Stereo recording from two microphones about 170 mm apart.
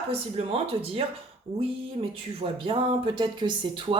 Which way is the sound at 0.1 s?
35° right (ahead or behind).